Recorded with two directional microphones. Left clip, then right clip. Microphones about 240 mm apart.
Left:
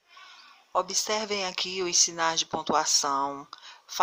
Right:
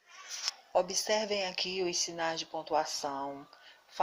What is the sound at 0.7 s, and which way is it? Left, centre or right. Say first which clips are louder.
Speech: left 3 dB; centre.